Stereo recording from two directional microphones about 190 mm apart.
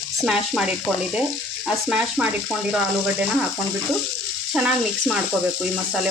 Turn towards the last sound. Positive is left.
turn(degrees=-5)  # may be behind; listen again after turning